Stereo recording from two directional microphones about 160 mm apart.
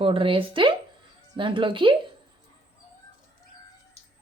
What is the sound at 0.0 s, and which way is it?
Speech, 35° right (ahead or behind).